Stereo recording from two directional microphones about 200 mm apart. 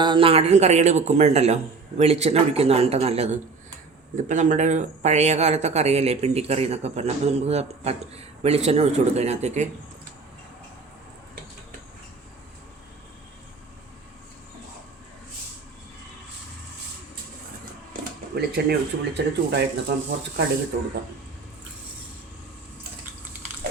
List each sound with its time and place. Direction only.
0.0 s speech: 25° right (ahead or behind)
4.3 s speech: 40° right (ahead or behind)
18.3 s speech: 55° right (ahead or behind)